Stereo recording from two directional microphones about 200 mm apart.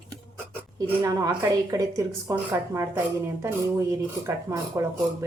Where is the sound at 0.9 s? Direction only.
20° right (ahead or behind).